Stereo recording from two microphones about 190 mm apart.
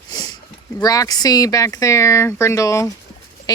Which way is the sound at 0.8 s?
20° left (ahead or behind).